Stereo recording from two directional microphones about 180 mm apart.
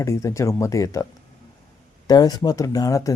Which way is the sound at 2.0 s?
20° left (ahead or behind).